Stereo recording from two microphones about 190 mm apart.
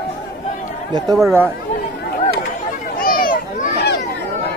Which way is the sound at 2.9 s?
50° left (ahead or behind).